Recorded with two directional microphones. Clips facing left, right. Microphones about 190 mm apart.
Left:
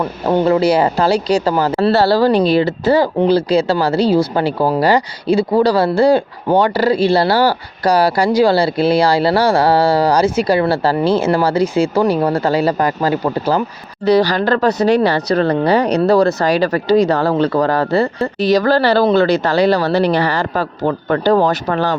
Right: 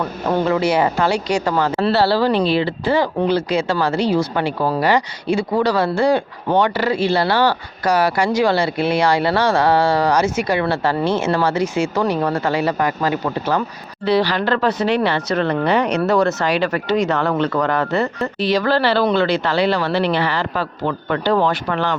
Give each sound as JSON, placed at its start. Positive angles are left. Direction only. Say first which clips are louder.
{"t": 0.4, "sound": "speech", "louder": "left 4 dB", "side_deg": 35}